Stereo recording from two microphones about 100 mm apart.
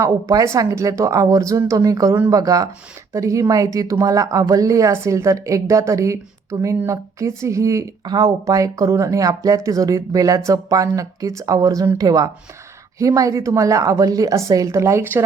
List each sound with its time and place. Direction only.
0.0 s speech: 30° right (ahead or behind)